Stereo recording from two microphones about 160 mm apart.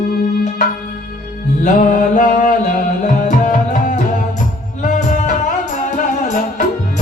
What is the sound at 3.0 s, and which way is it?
Tabla, 55° left (ahead or behind).